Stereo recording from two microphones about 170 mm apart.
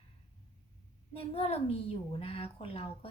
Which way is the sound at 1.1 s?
35° left (ahead or behind).